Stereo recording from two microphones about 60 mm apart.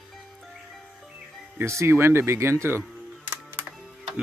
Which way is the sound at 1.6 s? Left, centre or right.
Right.